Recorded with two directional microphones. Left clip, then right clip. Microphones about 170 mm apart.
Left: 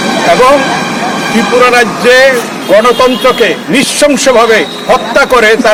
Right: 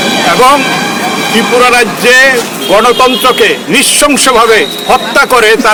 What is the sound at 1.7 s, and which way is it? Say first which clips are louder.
Speech: even; 15° right (ahead or behind).